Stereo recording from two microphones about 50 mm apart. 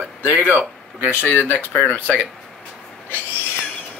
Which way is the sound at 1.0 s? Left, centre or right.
Left.